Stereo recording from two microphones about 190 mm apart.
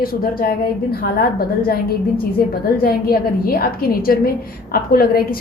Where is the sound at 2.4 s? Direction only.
50° left (ahead or behind).